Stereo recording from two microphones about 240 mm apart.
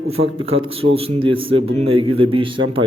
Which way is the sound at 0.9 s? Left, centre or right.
Right.